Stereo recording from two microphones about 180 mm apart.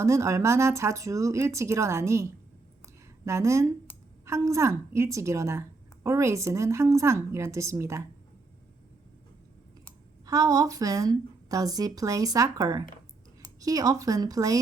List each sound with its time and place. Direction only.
0.0 s a woman's voice: 15° right (ahead or behind)
3.2 s a woman's voice: 15° right (ahead or behind)
10.2 s a woman's voice: 20° right (ahead or behind)